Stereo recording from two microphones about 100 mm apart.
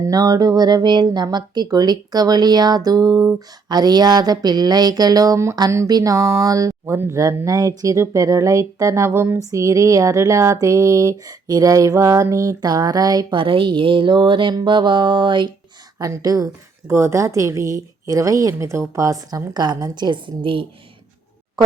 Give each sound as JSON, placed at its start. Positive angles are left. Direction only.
{"t": 0.0, "sound": "speech", "side_deg": -35}
{"t": 13.3, "sound": "speech", "side_deg": -60}
{"t": 16.0, "sound": "speech", "side_deg": -35}